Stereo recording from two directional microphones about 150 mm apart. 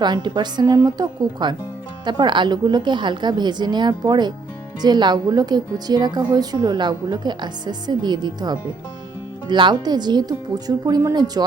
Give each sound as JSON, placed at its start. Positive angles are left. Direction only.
{"t": 0.0, "sound": "a woman's voice", "side_deg": -30}